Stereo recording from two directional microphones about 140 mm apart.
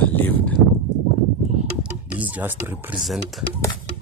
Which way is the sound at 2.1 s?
10° right (ahead or behind).